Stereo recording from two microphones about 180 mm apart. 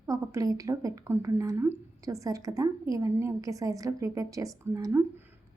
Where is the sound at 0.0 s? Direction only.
20° right (ahead or behind).